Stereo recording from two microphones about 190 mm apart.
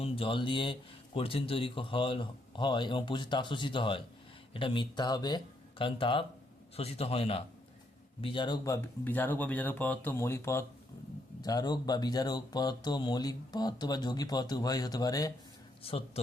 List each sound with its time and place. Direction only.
0.0 s a man's voice: 25° left (ahead or behind)
15.8 s a man's voice: 30° left (ahead or behind)